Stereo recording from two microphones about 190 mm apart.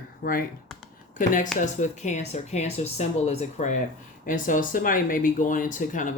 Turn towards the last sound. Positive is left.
turn(degrees=45)  # may be behind; listen again after turning